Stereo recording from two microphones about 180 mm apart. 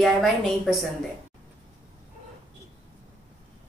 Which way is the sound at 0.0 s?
Centre (ahead or behind).